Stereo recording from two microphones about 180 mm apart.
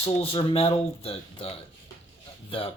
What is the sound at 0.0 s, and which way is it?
Speech, 30° left (ahead or behind).